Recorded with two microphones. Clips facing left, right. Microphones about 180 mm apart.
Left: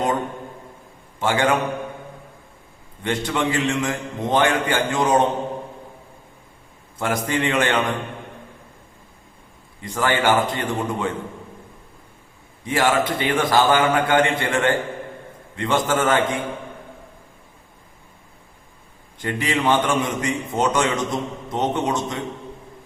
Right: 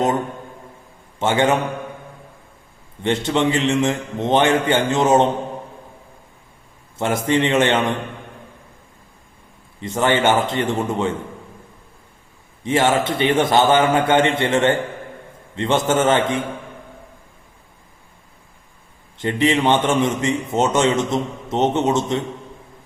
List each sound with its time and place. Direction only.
1.2 s a man's voice: 25° right (ahead or behind)
3.0 s a man's voice: 25° right (ahead or behind)
7.0 s a man's voice: 25° right (ahead or behind)
9.8 s a man's voice: 25° right (ahead or behind)
12.6 s a man's voice: 25° right (ahead or behind)
19.2 s a man's voice: 25° right (ahead or behind)